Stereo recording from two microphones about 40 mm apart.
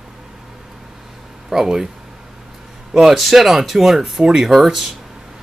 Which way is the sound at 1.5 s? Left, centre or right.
Centre.